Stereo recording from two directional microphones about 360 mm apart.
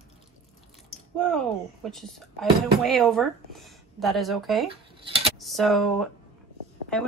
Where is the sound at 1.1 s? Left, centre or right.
Centre.